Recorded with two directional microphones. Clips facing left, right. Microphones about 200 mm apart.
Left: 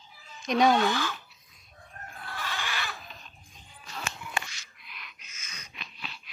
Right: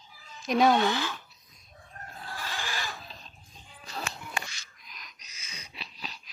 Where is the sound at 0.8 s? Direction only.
20° right (ahead or behind).